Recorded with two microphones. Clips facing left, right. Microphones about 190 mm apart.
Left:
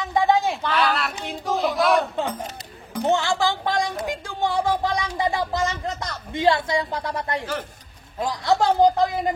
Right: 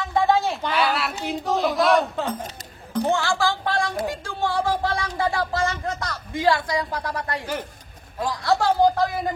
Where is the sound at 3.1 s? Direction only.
20° left (ahead or behind).